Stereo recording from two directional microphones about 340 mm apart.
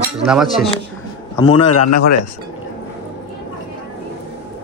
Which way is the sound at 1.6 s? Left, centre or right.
Left.